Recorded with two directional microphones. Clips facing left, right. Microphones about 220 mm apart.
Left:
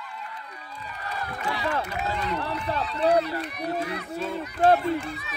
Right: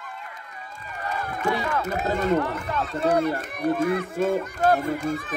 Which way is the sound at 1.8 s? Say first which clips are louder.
Right 6 dB; 45° right (ahead or behind).